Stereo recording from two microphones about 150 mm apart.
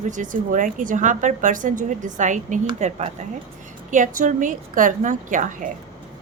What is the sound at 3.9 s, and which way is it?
A woman's voice, 60° right (ahead or behind).